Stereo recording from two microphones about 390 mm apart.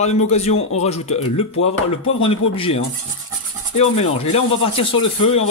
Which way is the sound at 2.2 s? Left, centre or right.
Centre.